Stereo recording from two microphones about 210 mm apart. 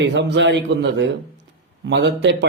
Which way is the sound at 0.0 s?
55° right (ahead or behind).